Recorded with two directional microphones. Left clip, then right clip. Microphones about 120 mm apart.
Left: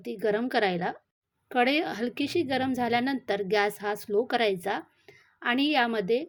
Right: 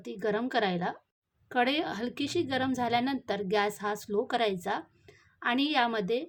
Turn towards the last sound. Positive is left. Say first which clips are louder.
# left 3 dB
turn(degrees=30)  # may be behind; listen again after turning